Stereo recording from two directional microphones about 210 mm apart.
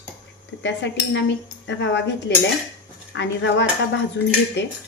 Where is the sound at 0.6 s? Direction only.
60° left (ahead or behind).